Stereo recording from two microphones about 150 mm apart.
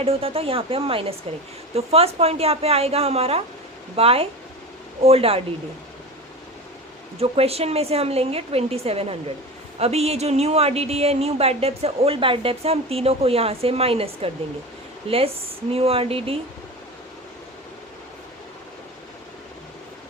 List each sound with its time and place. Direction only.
0.0 s speech: 40° right (ahead or behind)
7.2 s speech: 40° right (ahead or behind)